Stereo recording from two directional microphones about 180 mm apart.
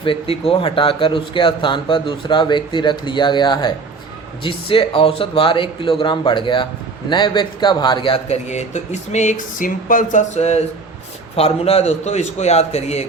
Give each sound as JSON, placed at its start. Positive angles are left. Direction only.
{"t": 0.0, "sound": "a man's voice", "side_deg": 30}